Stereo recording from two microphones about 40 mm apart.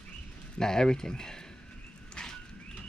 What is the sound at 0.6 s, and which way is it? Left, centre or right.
Speech, centre.